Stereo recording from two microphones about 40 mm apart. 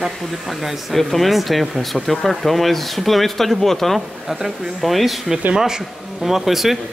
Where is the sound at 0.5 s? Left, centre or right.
Centre.